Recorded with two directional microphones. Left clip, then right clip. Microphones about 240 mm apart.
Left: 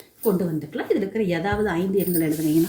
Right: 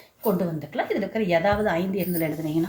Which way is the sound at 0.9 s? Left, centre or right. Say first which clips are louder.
Left 3 dB; centre.